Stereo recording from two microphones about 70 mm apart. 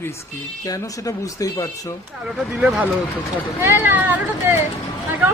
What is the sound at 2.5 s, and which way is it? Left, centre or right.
Speech, centre.